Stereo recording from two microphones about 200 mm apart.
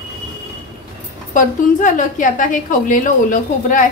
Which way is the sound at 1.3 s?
40° left (ahead or behind).